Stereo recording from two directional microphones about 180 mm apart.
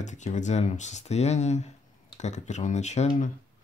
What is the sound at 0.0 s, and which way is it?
Speech, 40° left (ahead or behind).